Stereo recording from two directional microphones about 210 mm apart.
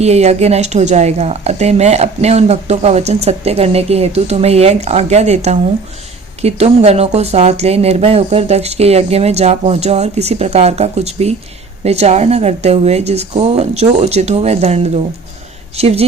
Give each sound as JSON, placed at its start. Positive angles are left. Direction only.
{"t": 0.0, "sound": "a woman's voice", "side_deg": -30}